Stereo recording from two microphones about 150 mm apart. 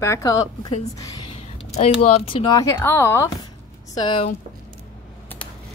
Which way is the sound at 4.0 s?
30° left (ahead or behind).